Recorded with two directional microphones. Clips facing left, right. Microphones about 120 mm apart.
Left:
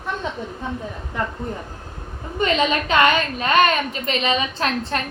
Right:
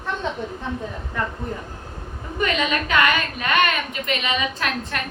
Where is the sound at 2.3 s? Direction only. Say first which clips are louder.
Left 3 dB; 30° left (ahead or behind).